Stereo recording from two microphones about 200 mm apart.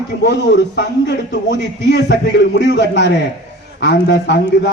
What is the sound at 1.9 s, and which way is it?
A man's voice, 60° left (ahead or behind).